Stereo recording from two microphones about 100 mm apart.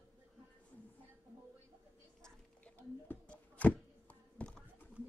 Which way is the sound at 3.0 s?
15° left (ahead or behind).